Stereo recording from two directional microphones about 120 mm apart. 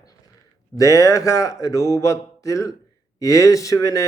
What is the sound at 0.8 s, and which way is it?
Speech, 25° left (ahead or behind).